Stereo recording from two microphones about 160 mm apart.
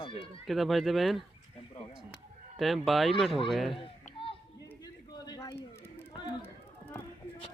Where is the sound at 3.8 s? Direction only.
35° left (ahead or behind).